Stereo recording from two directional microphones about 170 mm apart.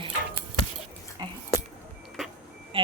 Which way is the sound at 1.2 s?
25° right (ahead or behind).